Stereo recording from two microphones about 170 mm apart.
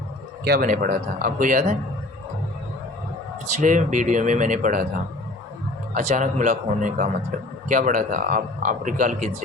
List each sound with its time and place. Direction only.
0.4 s speech: 60° right (ahead or behind)
3.5 s speech: 45° right (ahead or behind)
5.9 s speech: 45° right (ahead or behind)